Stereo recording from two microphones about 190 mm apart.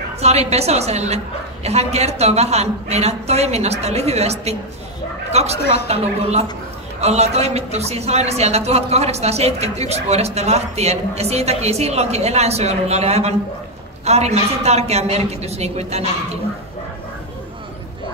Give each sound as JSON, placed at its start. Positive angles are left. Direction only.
{"t": 0.2, "sound": "a man's voice", "side_deg": -35}
{"t": 5.6, "sound": "a woman's voice", "side_deg": 60}
{"t": 7.0, "sound": "a man's voice", "side_deg": -35}